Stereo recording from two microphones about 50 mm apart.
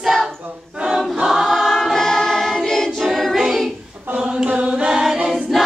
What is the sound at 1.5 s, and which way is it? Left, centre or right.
Choir, centre.